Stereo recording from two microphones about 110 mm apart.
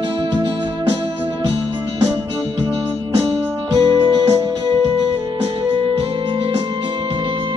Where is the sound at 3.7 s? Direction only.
35° right (ahead or behind).